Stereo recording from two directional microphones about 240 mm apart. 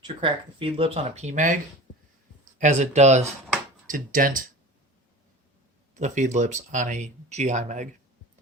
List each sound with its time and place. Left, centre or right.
0.2 s speech: right
2.6 s speech: right
6.0 s speech: right